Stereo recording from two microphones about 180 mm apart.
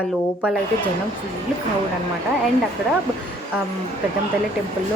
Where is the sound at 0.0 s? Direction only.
10° left (ahead or behind).